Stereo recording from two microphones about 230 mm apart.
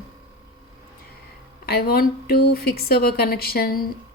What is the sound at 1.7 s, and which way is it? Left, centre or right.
A woman's voice, left.